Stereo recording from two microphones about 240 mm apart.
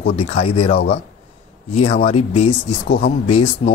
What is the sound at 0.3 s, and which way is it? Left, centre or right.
Speech, left.